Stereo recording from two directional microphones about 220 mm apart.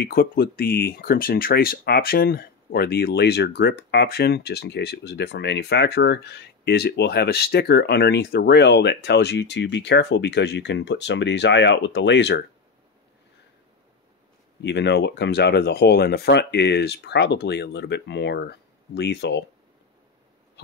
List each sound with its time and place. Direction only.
0.0 s speech: 45° left (ahead or behind)
14.6 s speech: 50° left (ahead or behind)